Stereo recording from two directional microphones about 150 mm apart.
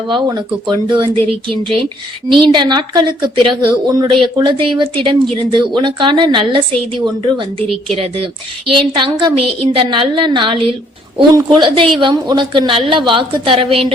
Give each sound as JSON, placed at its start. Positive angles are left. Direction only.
{"t": 0.1, "sound": "speech", "side_deg": -30}